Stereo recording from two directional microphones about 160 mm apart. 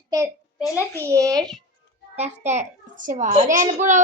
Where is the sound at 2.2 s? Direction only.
45° right (ahead or behind).